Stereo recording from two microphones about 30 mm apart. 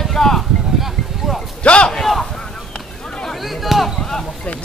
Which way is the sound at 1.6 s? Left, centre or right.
Left.